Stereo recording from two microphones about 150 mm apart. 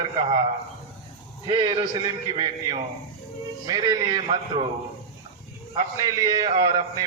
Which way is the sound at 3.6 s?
25° right (ahead or behind).